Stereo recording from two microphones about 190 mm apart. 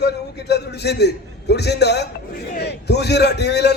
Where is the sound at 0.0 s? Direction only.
60° left (ahead or behind).